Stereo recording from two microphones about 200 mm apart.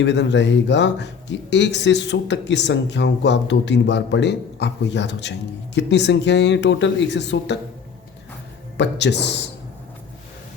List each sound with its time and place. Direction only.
0.0 s speech: 60° left (ahead or behind)
8.8 s speech: 60° left (ahead or behind)